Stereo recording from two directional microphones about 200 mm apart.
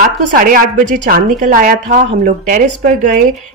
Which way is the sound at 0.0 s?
45° right (ahead or behind).